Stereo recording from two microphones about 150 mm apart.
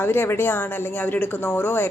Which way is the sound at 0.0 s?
15° left (ahead or behind).